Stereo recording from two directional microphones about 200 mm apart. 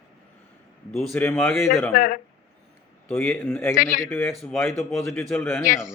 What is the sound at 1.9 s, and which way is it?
Speech, 45° left (ahead or behind).